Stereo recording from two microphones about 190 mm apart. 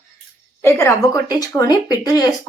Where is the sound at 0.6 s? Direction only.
15° left (ahead or behind).